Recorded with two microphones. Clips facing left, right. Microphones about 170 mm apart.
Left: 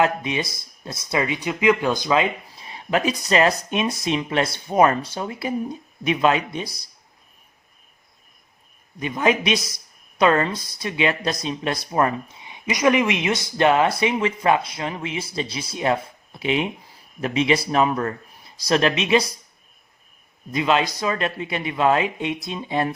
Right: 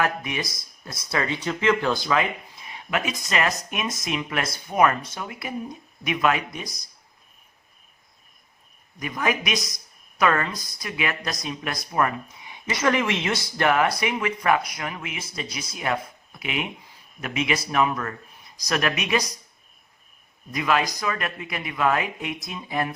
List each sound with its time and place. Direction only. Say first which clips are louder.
0.0 s speech: left 5 dB; 25° left (ahead or behind)
2.6 s speech: left 5 dB; 35° left (ahead or behind)
9.0 s speech: left 5 dB; 25° left (ahead or behind)
20.5 s speech: left 3 dB; 25° left (ahead or behind)